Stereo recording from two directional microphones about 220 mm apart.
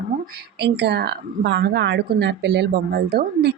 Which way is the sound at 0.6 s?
50° right (ahead or behind).